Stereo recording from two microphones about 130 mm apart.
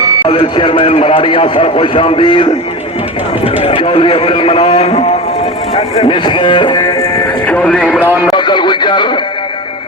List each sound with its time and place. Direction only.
0.3 s a man's voice: 40° left (ahead or behind)
7.4 s speech: 10° left (ahead or behind)
8.3 s speech: 35° left (ahead or behind)